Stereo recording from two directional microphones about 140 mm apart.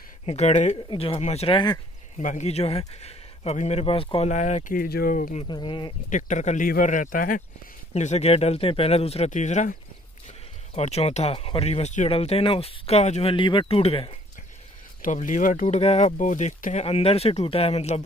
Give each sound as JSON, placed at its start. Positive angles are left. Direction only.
{"t": 0.3, "sound": "speech", "side_deg": 55}
{"t": 0.8, "sound": "speech", "side_deg": 40}
{"t": 4.3, "sound": "speech", "side_deg": 60}
{"t": 4.7, "sound": "speech", "side_deg": 90}
{"t": 5.5, "sound": "speech", "side_deg": 35}
{"t": 6.0, "sound": "speech", "side_deg": 65}
{"t": 7.9, "sound": "speech", "side_deg": 50}
{"t": 15.0, "sound": "speech", "side_deg": 65}
{"t": 15.6, "sound": "speech", "side_deg": 50}